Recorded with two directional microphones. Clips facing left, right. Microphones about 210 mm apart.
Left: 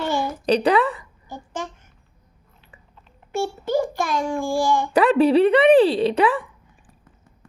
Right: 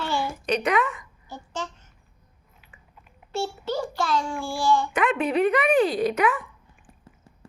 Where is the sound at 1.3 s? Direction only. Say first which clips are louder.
Left 3 dB; 15° left (ahead or behind).